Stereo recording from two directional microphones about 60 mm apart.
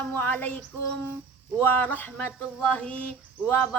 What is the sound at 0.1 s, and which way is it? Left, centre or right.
Female singing, left.